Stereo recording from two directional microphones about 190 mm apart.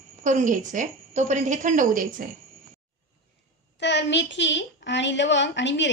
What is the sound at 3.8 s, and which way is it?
A woman's voice, 65° left (ahead or behind).